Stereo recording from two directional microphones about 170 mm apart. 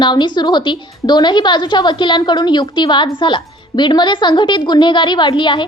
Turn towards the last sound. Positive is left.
turn(degrees=30)  # may be behind; listen again after turning